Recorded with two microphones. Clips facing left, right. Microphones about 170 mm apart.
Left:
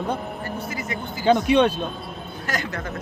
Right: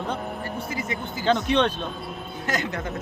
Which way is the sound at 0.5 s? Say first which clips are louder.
Right 1 dB; 25° right (ahead or behind).